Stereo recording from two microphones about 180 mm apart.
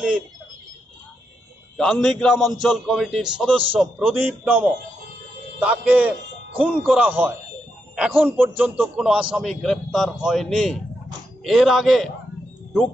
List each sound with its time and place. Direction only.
1.8 s a man's voice: centre (ahead or behind)